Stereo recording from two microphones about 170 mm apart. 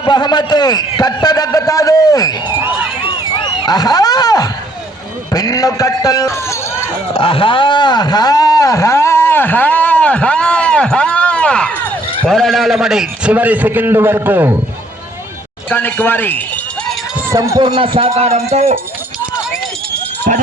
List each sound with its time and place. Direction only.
0.0 s a man's voice: 25° left (ahead or behind)
3.0 s a sound: 30° left (ahead or behind)
5.3 s a man's voice: 20° left (ahead or behind)
7.1 s a sound: 30° left (ahead or behind); by 11.7 s 5° left (ahead or behind)
12.2 s a man's voice: centre (ahead or behind)
15.7 s speech: 10° left (ahead or behind)
17.2 s a man's voice: 20° right (ahead or behind)
17.6 s speech: 30° right (ahead or behind)
20.3 s speech: 50° right (ahead or behind)